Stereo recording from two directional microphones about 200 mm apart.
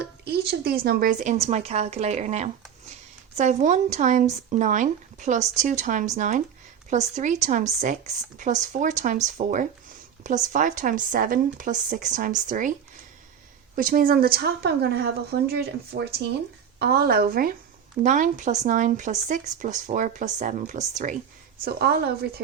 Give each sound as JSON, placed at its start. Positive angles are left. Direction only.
{"t": 0.0, "sound": "a sound", "side_deg": -55}
{"t": 0.9, "sound": "speech", "side_deg": -45}
{"t": 13.7, "sound": "a woman's voice", "side_deg": -45}
{"t": 21.6, "sound": "a woman's voice", "side_deg": -50}